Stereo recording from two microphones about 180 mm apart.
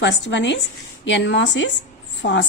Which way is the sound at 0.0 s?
80° left.